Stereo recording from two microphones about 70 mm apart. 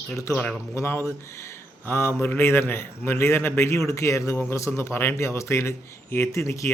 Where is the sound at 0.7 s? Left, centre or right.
Left.